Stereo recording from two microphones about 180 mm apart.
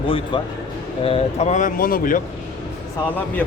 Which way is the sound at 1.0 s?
35° left (ahead or behind).